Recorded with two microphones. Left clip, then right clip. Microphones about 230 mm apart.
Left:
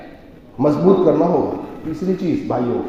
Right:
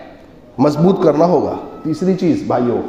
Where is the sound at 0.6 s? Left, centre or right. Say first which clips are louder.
Right 1 dB; right.